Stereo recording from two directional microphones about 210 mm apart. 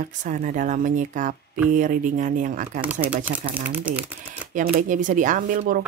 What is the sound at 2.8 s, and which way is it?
Speech, 5° right (ahead or behind).